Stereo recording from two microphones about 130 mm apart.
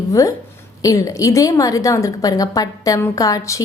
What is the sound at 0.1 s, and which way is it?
A woman's voice, 25° left (ahead or behind).